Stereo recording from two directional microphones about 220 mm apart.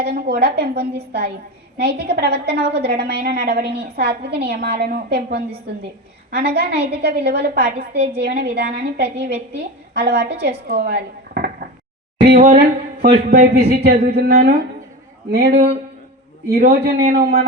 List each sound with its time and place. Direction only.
0.0 s a woman's voice: 50° right (ahead or behind)
13.1 s speech: 30° right (ahead or behind)
13.7 s a woman's voice: 45° right (ahead or behind)